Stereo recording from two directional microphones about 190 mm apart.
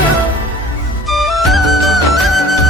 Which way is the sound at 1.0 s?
Centre (ahead or behind).